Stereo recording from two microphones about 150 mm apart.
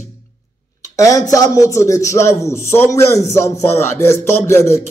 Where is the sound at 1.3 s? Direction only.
20° left (ahead or behind).